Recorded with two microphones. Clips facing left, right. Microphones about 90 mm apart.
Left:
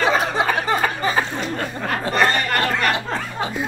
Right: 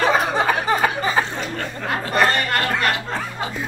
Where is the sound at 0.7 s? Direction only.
15° right (ahead or behind).